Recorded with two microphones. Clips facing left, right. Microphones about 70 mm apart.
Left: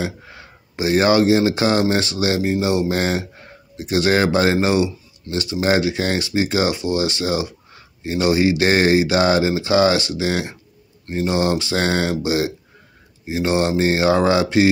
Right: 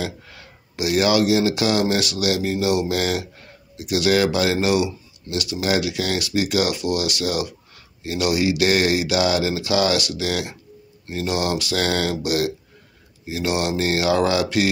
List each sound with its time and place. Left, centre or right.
0.0 s speech: left